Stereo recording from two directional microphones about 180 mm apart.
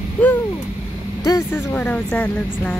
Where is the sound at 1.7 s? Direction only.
5° left (ahead or behind).